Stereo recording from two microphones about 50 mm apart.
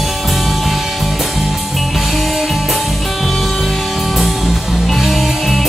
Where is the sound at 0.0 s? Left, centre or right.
Centre.